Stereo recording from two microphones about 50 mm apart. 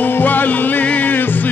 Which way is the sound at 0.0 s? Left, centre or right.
Left.